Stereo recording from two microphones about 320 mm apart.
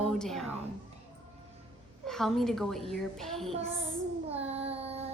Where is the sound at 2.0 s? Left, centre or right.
Centre.